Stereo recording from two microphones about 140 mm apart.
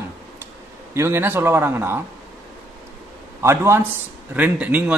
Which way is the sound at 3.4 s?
15° right (ahead or behind).